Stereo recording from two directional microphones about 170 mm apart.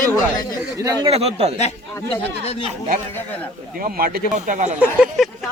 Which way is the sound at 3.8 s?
60° right (ahead or behind).